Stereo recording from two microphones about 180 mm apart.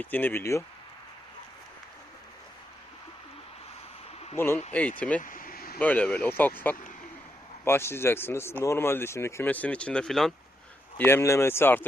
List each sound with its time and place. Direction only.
0.0 s speech: 10° left (ahead or behind)
4.4 s speech: 15° left (ahead or behind)
5.2 s a sound: 50° left (ahead or behind)
5.8 s speech: 10° left (ahead or behind)
10.9 s speech: 10° left (ahead or behind)